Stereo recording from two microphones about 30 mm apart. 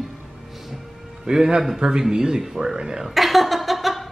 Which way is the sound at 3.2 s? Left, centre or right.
Centre.